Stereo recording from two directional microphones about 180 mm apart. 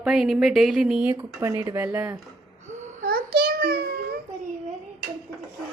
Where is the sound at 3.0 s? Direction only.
55° right (ahead or behind).